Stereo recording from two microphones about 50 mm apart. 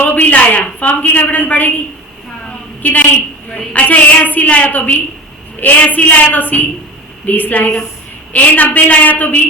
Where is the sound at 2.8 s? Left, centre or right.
Left.